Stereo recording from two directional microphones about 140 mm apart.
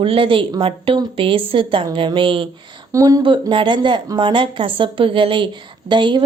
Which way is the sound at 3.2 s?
35° right (ahead or behind).